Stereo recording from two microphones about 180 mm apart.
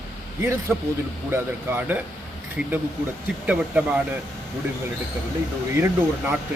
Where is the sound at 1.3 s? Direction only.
10° right (ahead or behind).